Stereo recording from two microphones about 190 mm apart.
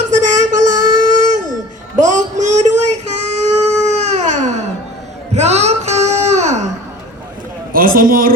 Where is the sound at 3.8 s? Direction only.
35° right (ahead or behind).